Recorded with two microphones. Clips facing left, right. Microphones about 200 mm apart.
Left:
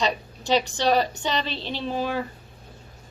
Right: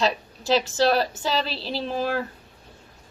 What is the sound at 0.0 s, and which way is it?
A woman's voice, 5° right (ahead or behind).